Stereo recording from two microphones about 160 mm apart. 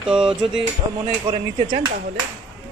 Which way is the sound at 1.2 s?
30° right (ahead or behind).